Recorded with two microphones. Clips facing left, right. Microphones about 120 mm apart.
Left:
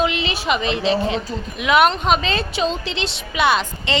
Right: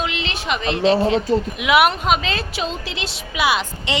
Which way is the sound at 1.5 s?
10° right (ahead or behind).